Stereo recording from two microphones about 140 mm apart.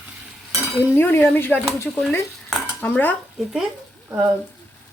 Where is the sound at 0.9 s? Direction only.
15° left (ahead or behind).